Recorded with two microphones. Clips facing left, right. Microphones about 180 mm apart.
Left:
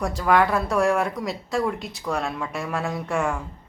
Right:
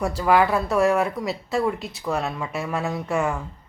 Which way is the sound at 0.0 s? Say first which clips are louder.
Right 1 dB; 5° right (ahead or behind).